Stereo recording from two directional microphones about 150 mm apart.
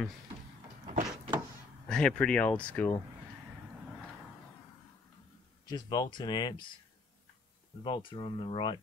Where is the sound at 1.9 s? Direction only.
5° left (ahead or behind).